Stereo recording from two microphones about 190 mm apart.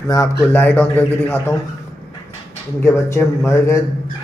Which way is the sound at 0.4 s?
10° left (ahead or behind).